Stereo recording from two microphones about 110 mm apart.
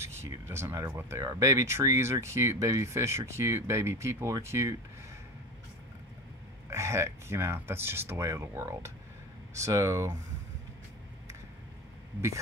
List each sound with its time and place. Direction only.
0.0 s speech: 25° right (ahead or behind)
6.7 s speech: 25° right (ahead or behind)